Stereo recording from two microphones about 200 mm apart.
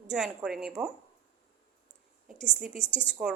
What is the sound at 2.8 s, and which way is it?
Speech, 25° left (ahead or behind).